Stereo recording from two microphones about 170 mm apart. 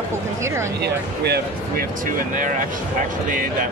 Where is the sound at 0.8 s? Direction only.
70° right (ahead or behind).